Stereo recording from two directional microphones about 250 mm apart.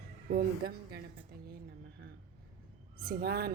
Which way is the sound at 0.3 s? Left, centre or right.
Right.